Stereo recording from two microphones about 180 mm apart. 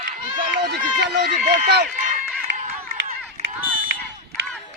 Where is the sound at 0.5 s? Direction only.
60° right (ahead or behind).